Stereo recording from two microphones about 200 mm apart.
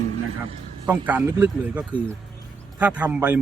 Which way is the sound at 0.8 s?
10° right (ahead or behind).